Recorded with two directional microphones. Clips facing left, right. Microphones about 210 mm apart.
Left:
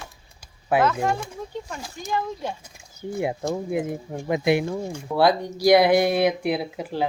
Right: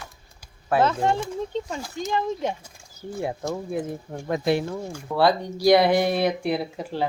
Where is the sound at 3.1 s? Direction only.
15° left (ahead or behind).